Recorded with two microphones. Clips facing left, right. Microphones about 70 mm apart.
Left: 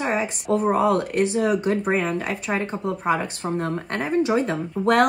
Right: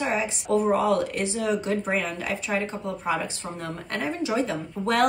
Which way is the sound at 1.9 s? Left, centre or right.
Left.